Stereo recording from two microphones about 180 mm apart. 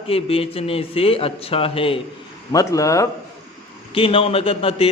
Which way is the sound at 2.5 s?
20° left (ahead or behind).